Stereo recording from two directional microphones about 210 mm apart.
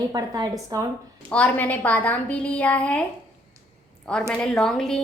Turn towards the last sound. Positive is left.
turn(degrees=5)  # may be behind; listen again after turning